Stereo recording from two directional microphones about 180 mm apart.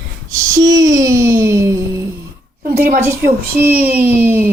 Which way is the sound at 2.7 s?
55° right (ahead or behind).